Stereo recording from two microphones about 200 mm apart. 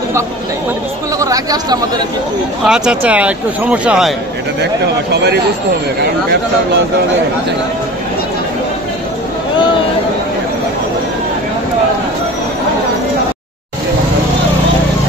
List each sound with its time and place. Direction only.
1.2 s speech: 20° right (ahead or behind)
2.6 s speech: 5° right (ahead or behind)